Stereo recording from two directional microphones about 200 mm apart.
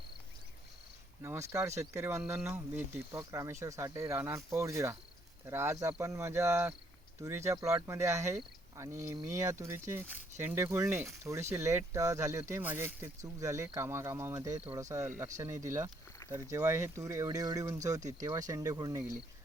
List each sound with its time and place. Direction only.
1.2 s speech: 15° right (ahead or behind)